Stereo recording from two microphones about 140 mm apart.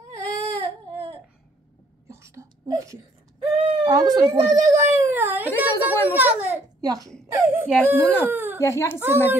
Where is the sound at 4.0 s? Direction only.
30° right (ahead or behind).